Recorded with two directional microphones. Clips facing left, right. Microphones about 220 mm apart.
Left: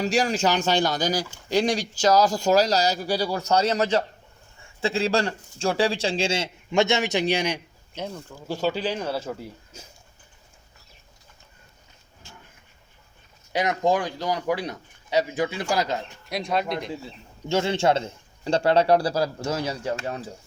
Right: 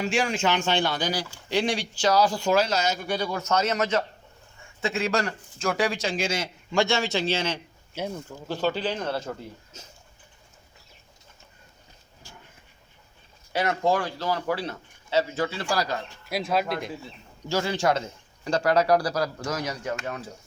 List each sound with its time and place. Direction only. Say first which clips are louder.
0.0 s a man's voice: left 3 dB; 35° left (ahead or behind); by 7.6 s 15° left (ahead or behind)
7.9 s speech: right 1 dB; 10° right (ahead or behind)
8.4 s a man's voice: left 1 dB; 10° left (ahead or behind)
13.5 s a man's voice: left 2 dB; 15° left (ahead or behind)
16.3 s speech: even; 5° right (ahead or behind)
17.5 s a man's voice: left 3 dB; 25° left (ahead or behind)